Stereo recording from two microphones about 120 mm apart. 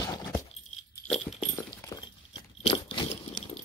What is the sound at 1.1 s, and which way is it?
Dog, 5° left (ahead or behind).